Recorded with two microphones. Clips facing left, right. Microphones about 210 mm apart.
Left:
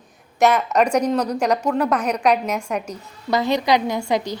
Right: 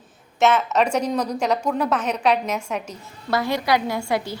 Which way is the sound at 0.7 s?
15° left (ahead or behind).